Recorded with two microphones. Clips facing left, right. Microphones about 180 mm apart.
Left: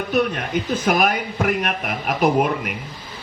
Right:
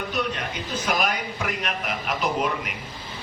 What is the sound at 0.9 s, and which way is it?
A man's voice, 55° left (ahead or behind).